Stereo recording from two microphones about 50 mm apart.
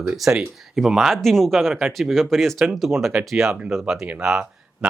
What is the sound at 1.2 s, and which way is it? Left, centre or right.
Speech, centre.